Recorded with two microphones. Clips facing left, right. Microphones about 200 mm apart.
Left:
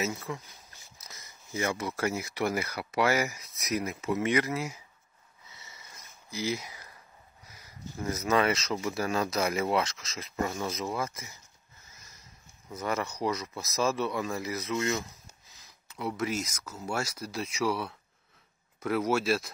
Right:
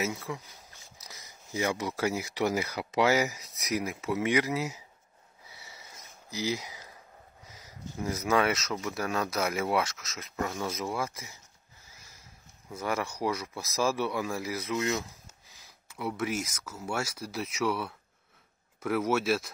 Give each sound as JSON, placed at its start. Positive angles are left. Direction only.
{"t": 0.0, "sound": "speech", "side_deg": -10}
{"t": 5.5, "sound": "sniff", "side_deg": -15}
{"t": 6.5, "sound": "speech", "side_deg": -20}
{"t": 8.4, "sound": "speech", "side_deg": -5}
{"t": 10.7, "sound": "speech", "side_deg": -10}
{"t": 12.7, "sound": "speech", "side_deg": -10}